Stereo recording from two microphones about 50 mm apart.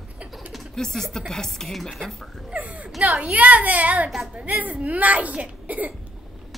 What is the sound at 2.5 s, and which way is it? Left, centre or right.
A child's voice, right.